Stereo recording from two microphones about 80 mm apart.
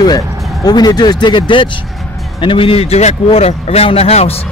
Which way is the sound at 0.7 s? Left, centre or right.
Left.